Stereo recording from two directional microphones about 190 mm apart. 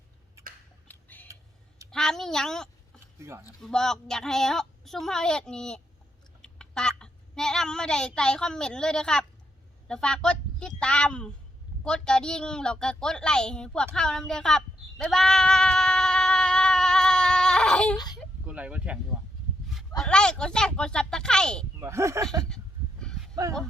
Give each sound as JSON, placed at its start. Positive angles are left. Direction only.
{"t": 0.9, "sound": "a sound", "side_deg": 10}
{"t": 3.2, "sound": "speech", "side_deg": -15}
{"t": 3.6, "sound": "a woman's voice", "side_deg": 5}
{"t": 17.9, "sound": "baby cry", "side_deg": 20}
{"t": 18.4, "sound": "speech", "side_deg": -5}
{"t": 20.0, "sound": "a woman's voice", "side_deg": 5}
{"t": 21.8, "sound": "speech", "side_deg": -15}
{"t": 22.4, "sound": "a sound", "side_deg": 5}
{"t": 23.3, "sound": "speech", "side_deg": -20}